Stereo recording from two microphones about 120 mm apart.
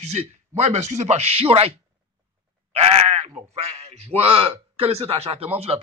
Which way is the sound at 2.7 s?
60° right (ahead or behind).